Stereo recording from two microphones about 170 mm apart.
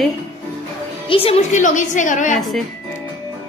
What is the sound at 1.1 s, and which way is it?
A woman's voice, 35° left (ahead or behind).